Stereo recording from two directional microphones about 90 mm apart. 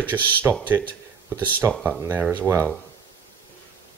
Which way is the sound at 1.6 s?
25° right (ahead or behind).